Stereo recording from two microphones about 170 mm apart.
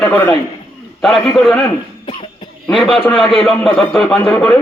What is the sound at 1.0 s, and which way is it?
Speech, centre (ahead or behind).